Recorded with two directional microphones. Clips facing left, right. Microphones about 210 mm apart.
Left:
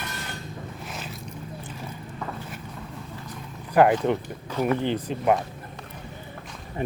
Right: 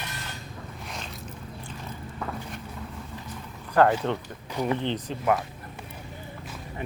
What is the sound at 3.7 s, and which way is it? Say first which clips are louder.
Speech: left 3 dB; 15° left (ahead or behind).